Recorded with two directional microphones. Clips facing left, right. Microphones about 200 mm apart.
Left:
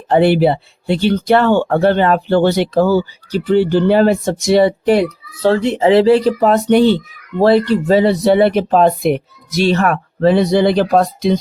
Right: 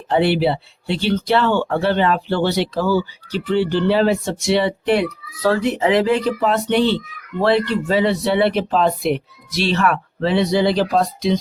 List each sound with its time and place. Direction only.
0.1 s speech: 50° left (ahead or behind)
5.4 s speech: 25° left (ahead or behind); by 11.3 s 55° left (ahead or behind)